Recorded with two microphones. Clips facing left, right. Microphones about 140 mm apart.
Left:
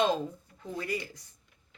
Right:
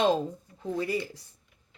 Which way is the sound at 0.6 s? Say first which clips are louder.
Right 5 dB; 30° right (ahead or behind).